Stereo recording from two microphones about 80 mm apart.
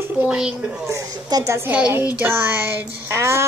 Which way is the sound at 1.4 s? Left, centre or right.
Right.